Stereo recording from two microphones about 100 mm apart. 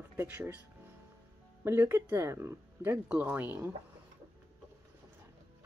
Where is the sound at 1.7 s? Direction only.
20° right (ahead or behind).